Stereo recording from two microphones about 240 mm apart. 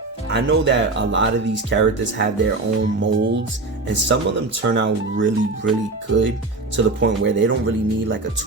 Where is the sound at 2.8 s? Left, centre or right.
Right.